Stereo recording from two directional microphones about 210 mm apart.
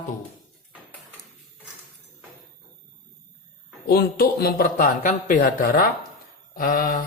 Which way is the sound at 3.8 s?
45° left (ahead or behind).